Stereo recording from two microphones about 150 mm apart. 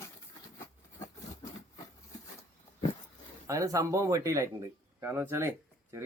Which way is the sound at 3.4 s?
20° right (ahead or behind).